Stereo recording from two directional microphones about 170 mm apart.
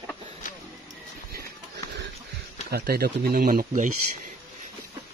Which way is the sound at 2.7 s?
65° right (ahead or behind).